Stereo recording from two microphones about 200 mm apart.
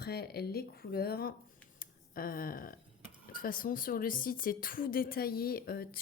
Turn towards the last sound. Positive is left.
turn(degrees=50)  # may be behind; listen again after turning